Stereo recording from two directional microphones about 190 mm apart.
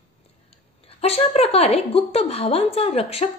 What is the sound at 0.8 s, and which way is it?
A woman's voice, 30° left (ahead or behind).